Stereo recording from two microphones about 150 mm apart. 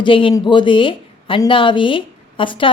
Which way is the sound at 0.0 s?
35° left (ahead or behind).